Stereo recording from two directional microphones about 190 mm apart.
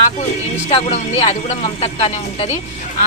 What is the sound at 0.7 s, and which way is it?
Speech, 30° left (ahead or behind).